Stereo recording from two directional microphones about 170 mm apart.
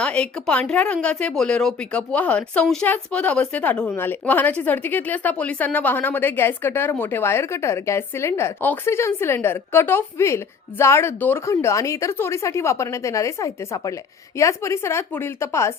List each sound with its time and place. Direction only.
0.0 s a woman's voice: 5° left (ahead or behind)